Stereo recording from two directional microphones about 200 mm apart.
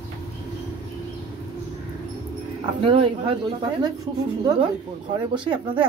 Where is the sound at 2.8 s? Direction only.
25° right (ahead or behind).